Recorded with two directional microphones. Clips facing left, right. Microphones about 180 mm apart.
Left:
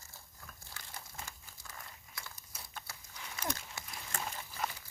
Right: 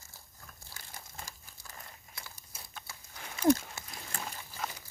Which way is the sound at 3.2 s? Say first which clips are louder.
Right 15 dB; 45° right (ahead or behind).